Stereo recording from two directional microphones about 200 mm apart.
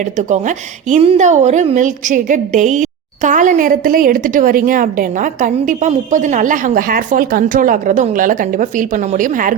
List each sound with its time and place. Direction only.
0.0 s a woman's voice: 40° right (ahead or behind)